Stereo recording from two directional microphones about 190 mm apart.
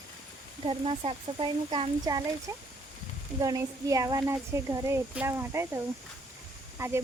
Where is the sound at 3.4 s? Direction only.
20° right (ahead or behind).